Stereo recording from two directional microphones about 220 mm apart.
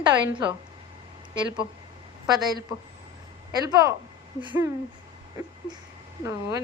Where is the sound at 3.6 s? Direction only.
15° right (ahead or behind).